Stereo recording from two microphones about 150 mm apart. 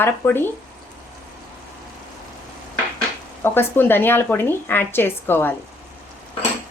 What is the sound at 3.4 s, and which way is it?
A woman's voice, 15° left (ahead or behind).